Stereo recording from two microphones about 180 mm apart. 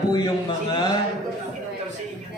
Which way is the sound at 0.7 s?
25° left (ahead or behind).